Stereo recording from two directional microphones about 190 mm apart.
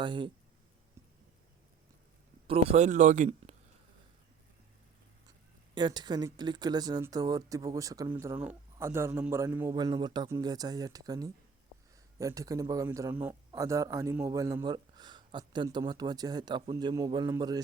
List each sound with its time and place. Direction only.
0.0 s speech: 25° right (ahead or behind)
2.5 s speech: 35° right (ahead or behind)
5.7 s speech: 25° right (ahead or behind)